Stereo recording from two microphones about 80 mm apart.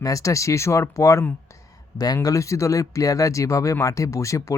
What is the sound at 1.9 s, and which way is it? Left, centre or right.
Speech, left.